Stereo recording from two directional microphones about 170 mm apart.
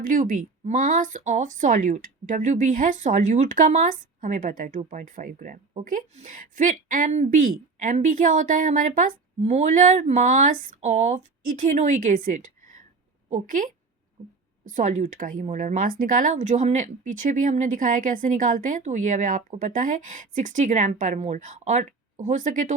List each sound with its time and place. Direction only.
0.0 s speech: 55° right (ahead or behind)